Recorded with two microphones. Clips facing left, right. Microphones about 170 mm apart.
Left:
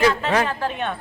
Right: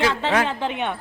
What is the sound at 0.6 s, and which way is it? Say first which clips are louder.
Speech: even; 15° right (ahead or behind).